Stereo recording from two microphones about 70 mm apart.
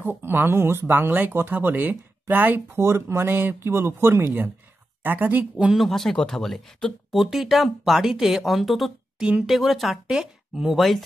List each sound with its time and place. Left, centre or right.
0.0 s speech: right
2.8 s speech: right
5.0 s speech: right
5.6 s speech: centre